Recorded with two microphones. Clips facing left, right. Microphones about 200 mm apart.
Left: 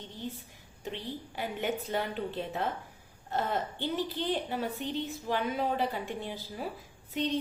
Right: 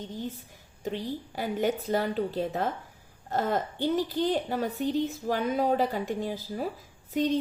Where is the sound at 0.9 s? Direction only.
40° right (ahead or behind).